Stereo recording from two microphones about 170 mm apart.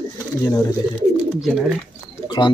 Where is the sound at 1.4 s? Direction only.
5° right (ahead or behind).